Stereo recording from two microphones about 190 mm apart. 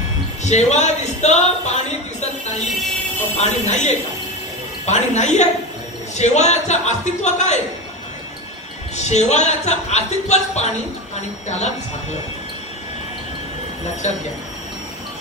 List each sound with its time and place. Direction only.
0.4 s a sound: 35° left (ahead or behind)
3.3 s speech: 35° left (ahead or behind)
8.9 s speech: 35° left (ahead or behind)
14.0 s speech: 35° left (ahead or behind)